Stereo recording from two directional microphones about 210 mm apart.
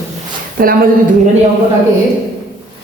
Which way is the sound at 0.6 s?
40° right (ahead or behind).